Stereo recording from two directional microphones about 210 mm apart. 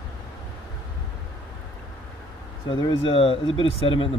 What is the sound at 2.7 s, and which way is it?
Speech, 25° left (ahead or behind).